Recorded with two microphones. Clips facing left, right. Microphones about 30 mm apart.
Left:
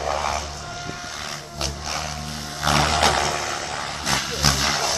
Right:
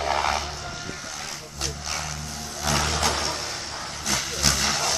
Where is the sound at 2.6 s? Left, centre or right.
Left.